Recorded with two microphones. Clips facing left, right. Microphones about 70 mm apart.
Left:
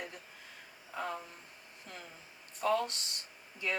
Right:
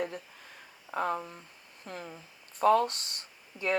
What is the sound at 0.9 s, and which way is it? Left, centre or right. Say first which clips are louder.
Speech: right 8 dB; right.